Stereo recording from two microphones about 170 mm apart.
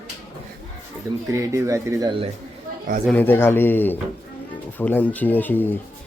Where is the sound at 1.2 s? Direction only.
20° right (ahead or behind).